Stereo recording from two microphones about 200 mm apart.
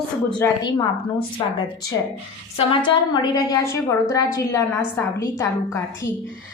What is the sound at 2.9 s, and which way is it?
A woman's voice, 20° left (ahead or behind).